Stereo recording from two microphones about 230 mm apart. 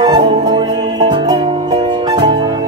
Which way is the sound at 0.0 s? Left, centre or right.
Centre.